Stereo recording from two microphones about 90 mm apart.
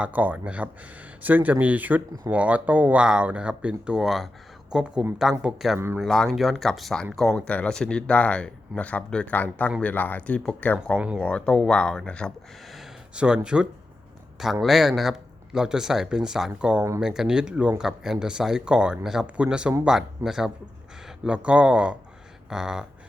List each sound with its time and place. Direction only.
0.0 s a man's voice: 20° right (ahead or behind); by 10.8 s 15° left (ahead or behind)
10.9 s speech: 15° right (ahead or behind)
11.2 s speech: 10° left (ahead or behind)
12.6 s a sound: centre (ahead or behind)
13.1 s a man's voice: 10° right (ahead or behind)